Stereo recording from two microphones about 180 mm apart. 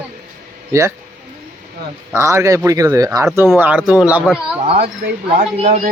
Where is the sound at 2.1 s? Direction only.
15° right (ahead or behind).